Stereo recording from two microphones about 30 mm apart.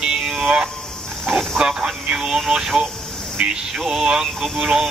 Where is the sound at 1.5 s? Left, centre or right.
Right.